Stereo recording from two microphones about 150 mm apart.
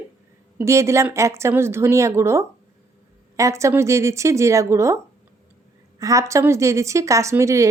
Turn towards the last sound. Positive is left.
turn(degrees=-20)  # may be behind; listen again after turning